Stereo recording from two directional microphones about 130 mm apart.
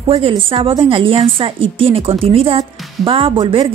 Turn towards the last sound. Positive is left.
turn(degrees=-45)  # may be behind; listen again after turning